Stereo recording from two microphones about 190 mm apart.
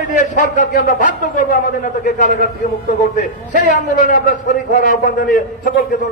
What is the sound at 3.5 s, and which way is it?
A man's voice, 45° left (ahead or behind).